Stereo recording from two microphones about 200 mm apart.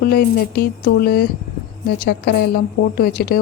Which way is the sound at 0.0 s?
50° left (ahead or behind).